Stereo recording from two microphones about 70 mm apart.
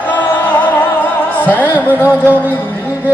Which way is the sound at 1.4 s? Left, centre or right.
Left.